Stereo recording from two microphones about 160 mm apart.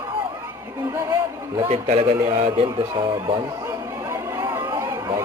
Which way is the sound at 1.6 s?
40° right (ahead or behind).